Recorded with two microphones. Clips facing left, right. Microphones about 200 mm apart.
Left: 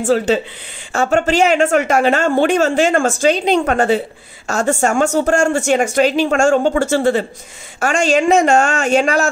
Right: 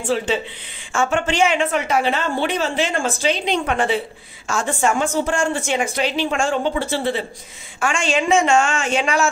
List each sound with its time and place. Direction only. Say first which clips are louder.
0.0 s speech: left 6 dB; 40° left (ahead or behind)